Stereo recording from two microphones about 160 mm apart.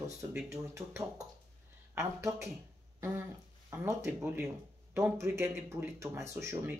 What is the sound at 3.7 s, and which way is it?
Speech, 15° right (ahead or behind).